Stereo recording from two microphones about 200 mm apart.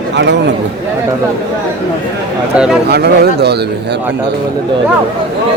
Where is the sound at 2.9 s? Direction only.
55° right (ahead or behind).